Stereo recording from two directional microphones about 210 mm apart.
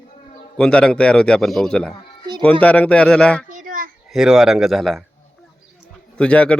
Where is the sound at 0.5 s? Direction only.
5° left (ahead or behind).